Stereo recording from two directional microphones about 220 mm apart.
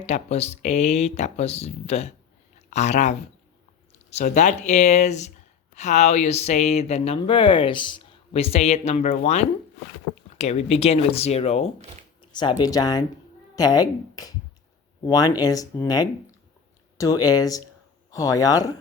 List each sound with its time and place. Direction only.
0.0 s speech: 30° left (ahead or behind)